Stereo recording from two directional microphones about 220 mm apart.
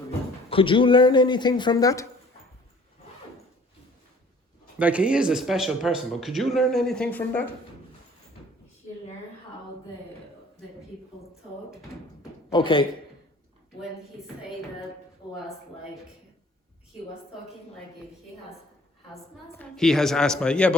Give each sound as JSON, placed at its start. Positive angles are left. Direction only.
{"t": 0.5, "sound": "speech", "side_deg": 25}
{"t": 4.8, "sound": "speech", "side_deg": -5}
{"t": 12.5, "sound": "a man's voice", "side_deg": 25}
{"t": 19.5, "sound": "speech", "side_deg": 0}